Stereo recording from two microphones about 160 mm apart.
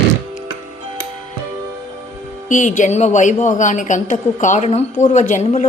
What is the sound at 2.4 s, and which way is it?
A woman's voice, 50° left (ahead or behind).